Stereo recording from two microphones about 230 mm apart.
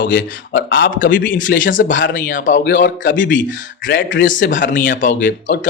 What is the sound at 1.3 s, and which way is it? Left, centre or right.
A man's voice, left.